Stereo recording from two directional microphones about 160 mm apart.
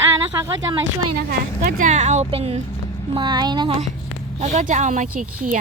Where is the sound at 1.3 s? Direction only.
60° right (ahead or behind); by 2.6 s 40° right (ahead or behind).